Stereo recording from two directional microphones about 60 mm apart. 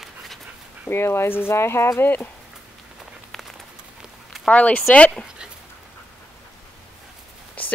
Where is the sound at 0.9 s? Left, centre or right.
Left.